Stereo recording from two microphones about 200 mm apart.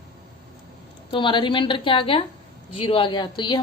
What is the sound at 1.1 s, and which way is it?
A woman's voice, 25° left (ahead or behind).